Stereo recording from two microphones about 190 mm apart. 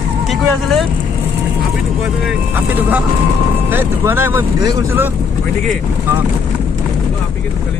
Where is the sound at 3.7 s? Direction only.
10° right (ahead or behind).